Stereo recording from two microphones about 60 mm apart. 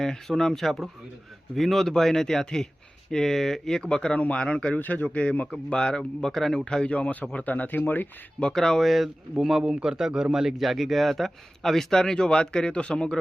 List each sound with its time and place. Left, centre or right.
0.0 s speech: centre
4.8 s speech: left
8.4 s a man's voice: centre